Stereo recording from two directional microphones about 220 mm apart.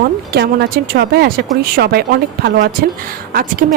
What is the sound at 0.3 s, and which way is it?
Speech, 45° right (ahead or behind).